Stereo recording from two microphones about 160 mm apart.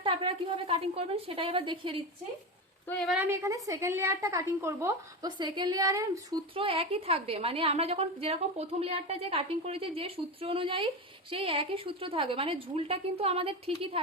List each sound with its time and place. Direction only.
0.0 s a woman's voice: 30° right (ahead or behind)
3.1 s a woman's voice: 10° right (ahead or behind)
6.5 s a woman's voice: 35° right (ahead or behind)